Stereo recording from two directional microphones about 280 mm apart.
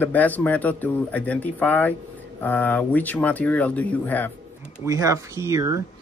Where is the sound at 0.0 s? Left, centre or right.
Centre.